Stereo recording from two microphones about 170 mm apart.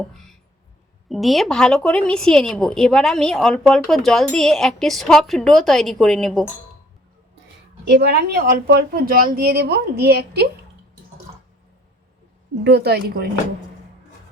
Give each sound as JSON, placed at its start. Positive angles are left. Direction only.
{"t": 1.0, "sound": "a woman's voice", "side_deg": 0}
{"t": 7.9, "sound": "speech", "side_deg": -70}
{"t": 12.6, "sound": "a woman's voice", "side_deg": -75}